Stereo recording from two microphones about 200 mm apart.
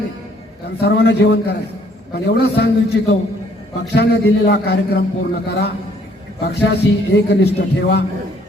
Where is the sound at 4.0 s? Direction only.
55° left (ahead or behind).